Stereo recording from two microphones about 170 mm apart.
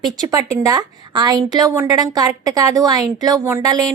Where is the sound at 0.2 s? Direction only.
20° right (ahead or behind).